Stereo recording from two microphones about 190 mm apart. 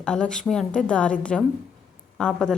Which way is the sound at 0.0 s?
5° left (ahead or behind).